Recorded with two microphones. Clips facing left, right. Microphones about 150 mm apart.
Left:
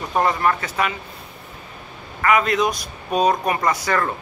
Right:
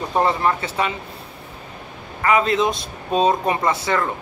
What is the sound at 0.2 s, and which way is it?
Speech, 25° right (ahead or behind).